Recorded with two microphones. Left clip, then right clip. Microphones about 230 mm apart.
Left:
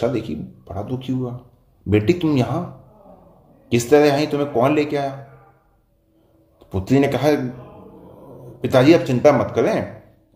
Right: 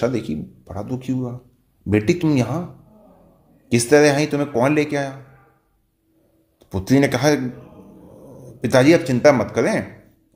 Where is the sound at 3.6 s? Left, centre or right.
Right.